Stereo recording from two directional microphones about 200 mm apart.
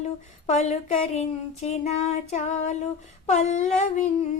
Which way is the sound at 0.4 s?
35° left (ahead or behind).